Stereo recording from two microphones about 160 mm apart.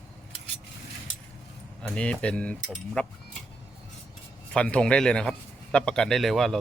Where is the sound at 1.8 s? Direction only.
5° left (ahead or behind).